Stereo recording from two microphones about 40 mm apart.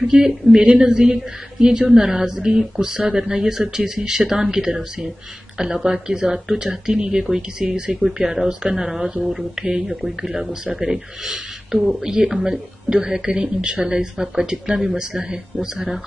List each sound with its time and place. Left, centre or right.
0.1 s speech: centre
1.9 s speech: centre
8.2 s speech: centre
9.6 s speech: centre
9.8 s speech: centre